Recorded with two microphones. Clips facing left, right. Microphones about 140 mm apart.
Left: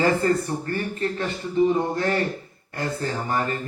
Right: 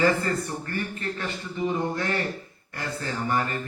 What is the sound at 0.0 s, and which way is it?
A man's voice, 35° left (ahead or behind).